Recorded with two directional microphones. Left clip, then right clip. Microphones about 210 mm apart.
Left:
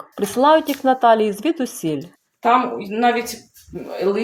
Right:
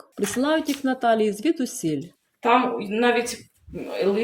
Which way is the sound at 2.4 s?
30° left (ahead or behind).